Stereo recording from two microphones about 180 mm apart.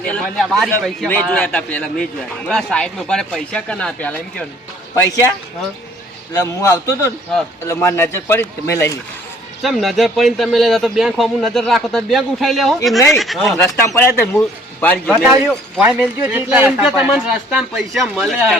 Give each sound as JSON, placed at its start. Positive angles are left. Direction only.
{"t": 0.0, "sound": "a man's voice", "side_deg": 5}
{"t": 6.3, "sound": "a man's voice", "side_deg": 15}
{"t": 9.6, "sound": "a man's voice", "side_deg": 0}
{"t": 13.7, "sound": "a man's voice", "side_deg": 15}
{"t": 15.2, "sound": "a man's voice", "side_deg": -5}